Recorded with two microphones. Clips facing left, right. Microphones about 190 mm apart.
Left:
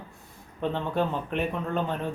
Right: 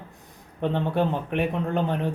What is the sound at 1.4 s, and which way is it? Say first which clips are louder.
Speech: right 4 dB; 15° right (ahead or behind).